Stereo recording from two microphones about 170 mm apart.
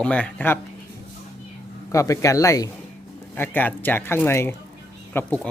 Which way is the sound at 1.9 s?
20° left (ahead or behind).